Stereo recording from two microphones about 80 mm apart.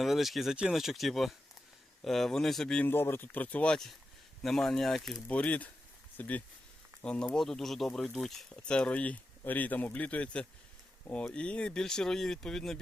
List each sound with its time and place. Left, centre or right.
0.0 s speech: centre
2.8 s speech: left
4.4 s speech: centre
5.3 s speech: centre